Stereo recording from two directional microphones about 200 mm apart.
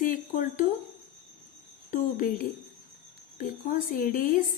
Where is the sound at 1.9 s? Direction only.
45° left (ahead or behind).